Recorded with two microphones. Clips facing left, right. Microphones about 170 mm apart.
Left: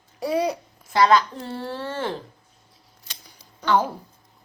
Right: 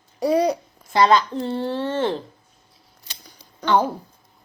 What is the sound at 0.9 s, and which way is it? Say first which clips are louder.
A child's voice: right 1 dB; 25° right (ahead or behind).